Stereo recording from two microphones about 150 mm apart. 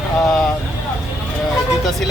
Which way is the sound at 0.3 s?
5° left (ahead or behind).